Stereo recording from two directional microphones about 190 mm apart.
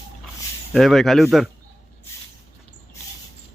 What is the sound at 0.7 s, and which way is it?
Speech, centre (ahead or behind).